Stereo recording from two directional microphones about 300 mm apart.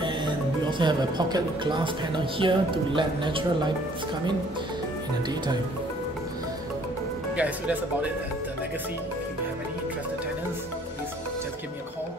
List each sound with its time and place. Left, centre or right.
0.0 s speech: centre
7.3 s speech: centre